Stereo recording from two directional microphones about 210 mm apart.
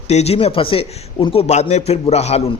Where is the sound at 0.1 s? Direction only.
30° left (ahead or behind).